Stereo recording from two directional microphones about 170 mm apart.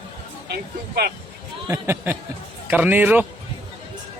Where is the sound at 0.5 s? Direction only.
65° right (ahead or behind).